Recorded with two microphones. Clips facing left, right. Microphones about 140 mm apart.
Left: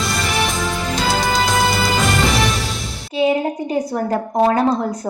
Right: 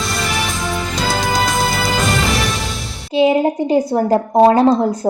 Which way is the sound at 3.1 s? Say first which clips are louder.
Right 4 dB; 25° right (ahead or behind).